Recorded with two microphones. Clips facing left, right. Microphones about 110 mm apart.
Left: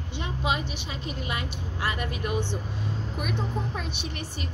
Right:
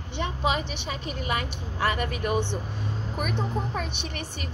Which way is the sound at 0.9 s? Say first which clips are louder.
Right 5 dB; 45° right (ahead or behind).